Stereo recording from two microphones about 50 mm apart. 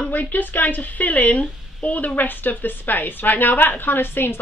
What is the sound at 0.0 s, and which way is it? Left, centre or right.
A woman's voice, left.